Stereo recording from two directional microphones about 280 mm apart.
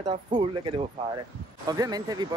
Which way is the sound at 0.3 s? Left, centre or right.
Centre.